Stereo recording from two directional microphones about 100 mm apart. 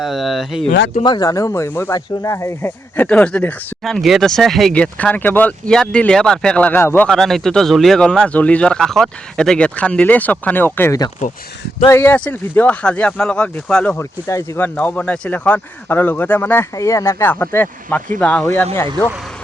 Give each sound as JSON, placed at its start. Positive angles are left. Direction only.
{"t": 0.0, "sound": "speech", "side_deg": 0}
{"t": 1.0, "sound": "speech", "side_deg": 45}
{"t": 3.1, "sound": "speech", "side_deg": 10}
{"t": 4.7, "sound": "speech", "side_deg": 15}
{"t": 7.1, "sound": "speech", "side_deg": 0}
{"t": 13.9, "sound": "speech", "side_deg": 30}
{"t": 14.6, "sound": "speech", "side_deg": 15}
{"t": 16.7, "sound": "speech", "side_deg": 30}